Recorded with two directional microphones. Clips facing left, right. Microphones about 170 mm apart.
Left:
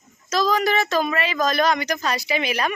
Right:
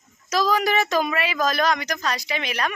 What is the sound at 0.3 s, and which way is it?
Speech, 10° right (ahead or behind).